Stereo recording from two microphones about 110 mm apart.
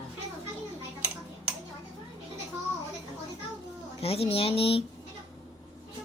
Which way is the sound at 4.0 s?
65° left (ahead or behind).